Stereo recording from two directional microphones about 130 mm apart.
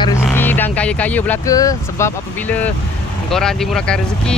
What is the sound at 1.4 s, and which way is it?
Speech, 25° left (ahead or behind).